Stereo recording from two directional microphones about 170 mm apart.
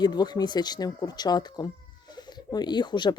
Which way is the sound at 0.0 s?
25° left (ahead or behind).